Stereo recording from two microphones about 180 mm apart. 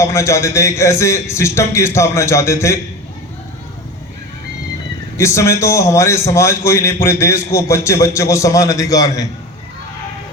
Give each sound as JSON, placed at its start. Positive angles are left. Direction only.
{"t": 0.0, "sound": "a man's voice", "side_deg": 15}
{"t": 5.1, "sound": "a man's voice", "side_deg": 15}